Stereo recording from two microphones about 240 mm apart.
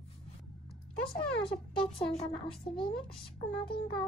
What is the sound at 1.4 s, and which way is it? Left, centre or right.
Speech, centre.